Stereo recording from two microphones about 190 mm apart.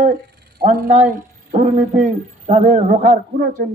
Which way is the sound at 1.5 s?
40° right (ahead or behind).